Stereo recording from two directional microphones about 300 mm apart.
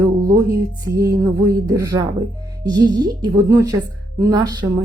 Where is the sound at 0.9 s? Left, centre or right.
Centre.